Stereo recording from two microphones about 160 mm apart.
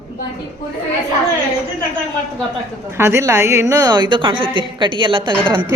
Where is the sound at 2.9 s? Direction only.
15° right (ahead or behind).